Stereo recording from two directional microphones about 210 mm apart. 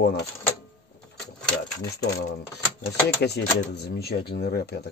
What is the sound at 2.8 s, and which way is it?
Speech, 50° left (ahead or behind).